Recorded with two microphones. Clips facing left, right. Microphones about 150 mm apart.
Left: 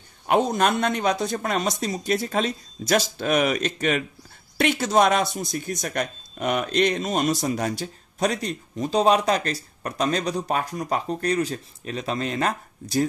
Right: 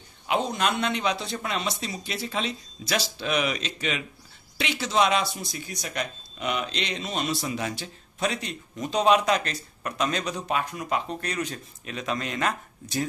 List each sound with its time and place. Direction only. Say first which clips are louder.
0.3 s speech: left 5 dB; 50° left (ahead or behind)